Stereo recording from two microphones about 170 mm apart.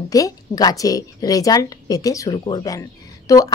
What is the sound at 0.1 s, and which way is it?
Speech, 20° left (ahead or behind).